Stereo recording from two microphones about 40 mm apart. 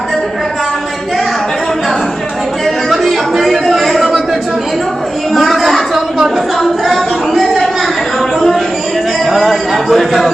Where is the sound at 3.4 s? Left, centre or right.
Centre.